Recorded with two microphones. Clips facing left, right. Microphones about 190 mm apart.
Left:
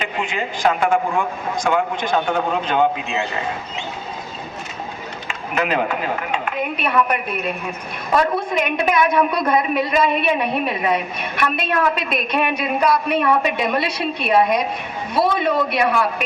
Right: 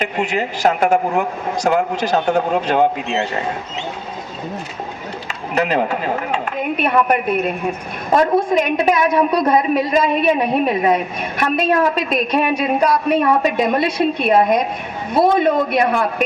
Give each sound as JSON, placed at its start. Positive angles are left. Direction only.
{"t": 0.0, "sound": "a woman's voice", "side_deg": -40}
{"t": 5.5, "sound": "a woman's voice", "side_deg": -40}